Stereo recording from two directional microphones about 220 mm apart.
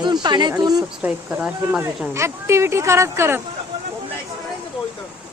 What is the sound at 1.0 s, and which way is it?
Speech, 5° right (ahead or behind).